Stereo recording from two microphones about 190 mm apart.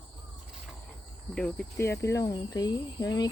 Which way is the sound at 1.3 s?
5° left (ahead or behind).